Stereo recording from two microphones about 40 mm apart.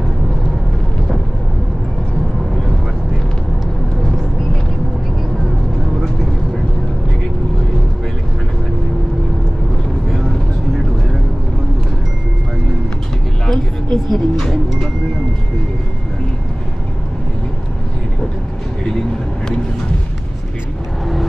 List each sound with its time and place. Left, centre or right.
13.5 s music: centre
18.9 s vehicle: centre